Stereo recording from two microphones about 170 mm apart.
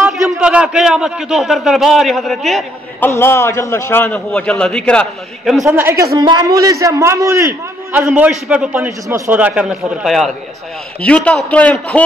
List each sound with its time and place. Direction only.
0.0 s a man's voice: 5° right (ahead or behind)
3.0 s a man's voice: 15° left (ahead or behind)
5.7 s a man's voice: 15° right (ahead or behind)
8.1 s a man's voice: 5° right (ahead or behind)